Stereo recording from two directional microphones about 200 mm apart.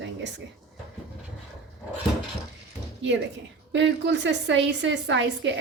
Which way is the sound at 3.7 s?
60° right (ahead or behind).